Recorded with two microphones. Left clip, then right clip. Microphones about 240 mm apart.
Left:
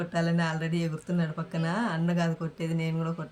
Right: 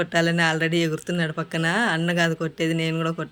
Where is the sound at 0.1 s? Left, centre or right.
Centre.